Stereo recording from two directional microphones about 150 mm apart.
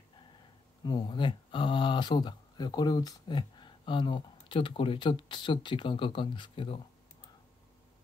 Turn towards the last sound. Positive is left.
turn(degrees=35)  # may be behind; listen again after turning